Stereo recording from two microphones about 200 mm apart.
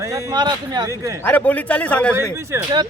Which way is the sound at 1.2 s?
5° left (ahead or behind).